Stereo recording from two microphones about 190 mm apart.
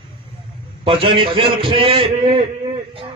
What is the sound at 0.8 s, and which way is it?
A man's voice, 25° right (ahead or behind).